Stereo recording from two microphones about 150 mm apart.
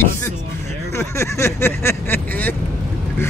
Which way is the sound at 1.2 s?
15° left (ahead or behind).